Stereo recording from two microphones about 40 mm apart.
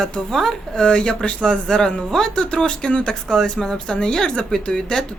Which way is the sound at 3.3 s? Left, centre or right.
Centre.